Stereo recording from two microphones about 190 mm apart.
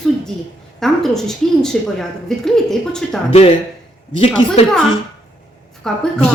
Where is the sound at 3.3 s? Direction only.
30° left (ahead or behind).